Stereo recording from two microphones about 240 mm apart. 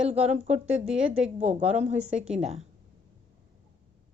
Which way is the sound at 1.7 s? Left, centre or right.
Right.